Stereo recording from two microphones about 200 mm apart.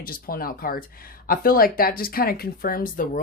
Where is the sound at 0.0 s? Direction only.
45° left (ahead or behind).